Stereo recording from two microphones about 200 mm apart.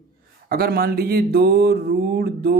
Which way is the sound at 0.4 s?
50° right (ahead or behind).